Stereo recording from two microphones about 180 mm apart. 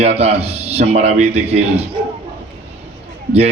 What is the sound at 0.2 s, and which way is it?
A man's voice, 35° right (ahead or behind).